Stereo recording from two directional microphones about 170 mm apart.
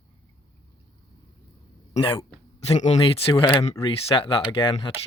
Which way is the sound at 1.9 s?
30° left (ahead or behind).